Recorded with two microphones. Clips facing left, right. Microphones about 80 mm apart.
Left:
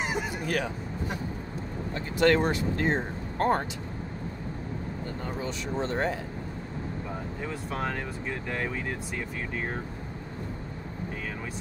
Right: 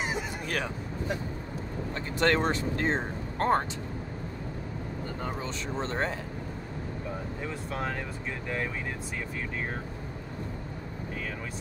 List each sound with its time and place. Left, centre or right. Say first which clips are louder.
2.1 s speech: left 3 dB; right
5.4 s speech: left 2 dB; right